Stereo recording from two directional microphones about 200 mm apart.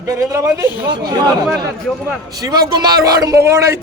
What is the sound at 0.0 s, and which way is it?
A man's voice, 15° right (ahead or behind).